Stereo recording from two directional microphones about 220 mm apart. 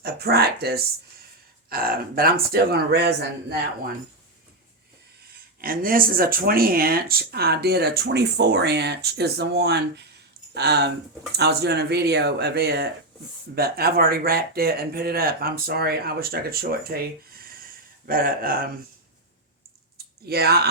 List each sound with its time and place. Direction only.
0.0 s speech: 45° right (ahead or behind)
5.5 s speech: 40° right (ahead or behind)
20.2 s speech: 45° right (ahead or behind)